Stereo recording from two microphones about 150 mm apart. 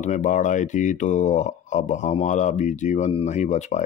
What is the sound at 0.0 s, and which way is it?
Speech, 55° left (ahead or behind).